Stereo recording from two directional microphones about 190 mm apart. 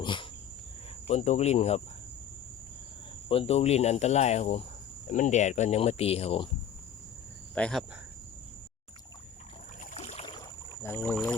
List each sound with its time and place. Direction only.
0.0 s cricket: 25° left (ahead or behind)
1.0 s speech: 35° left (ahead or behind)
3.2 s speech: 30° left (ahead or behind)
7.5 s speech: 5° left (ahead or behind)
9.8 s boat: 35° left (ahead or behind)
10.8 s speech: 10° left (ahead or behind)